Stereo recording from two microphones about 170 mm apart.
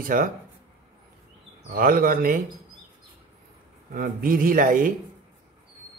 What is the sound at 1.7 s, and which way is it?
Speech, 60° right (ahead or behind).